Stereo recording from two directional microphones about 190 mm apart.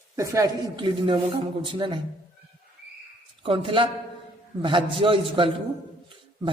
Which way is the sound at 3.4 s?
25° right (ahead or behind).